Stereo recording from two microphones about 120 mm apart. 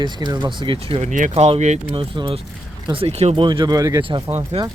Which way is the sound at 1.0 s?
80° right.